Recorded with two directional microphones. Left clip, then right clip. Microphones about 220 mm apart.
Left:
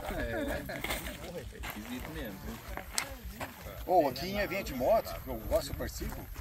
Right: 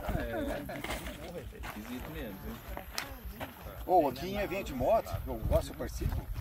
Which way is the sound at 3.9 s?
30° left (ahead or behind).